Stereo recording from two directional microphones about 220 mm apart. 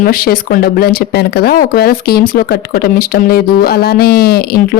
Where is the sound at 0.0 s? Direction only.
40° left (ahead or behind).